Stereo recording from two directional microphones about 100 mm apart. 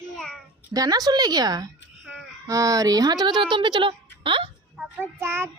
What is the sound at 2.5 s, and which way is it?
Speech, 35° right (ahead or behind).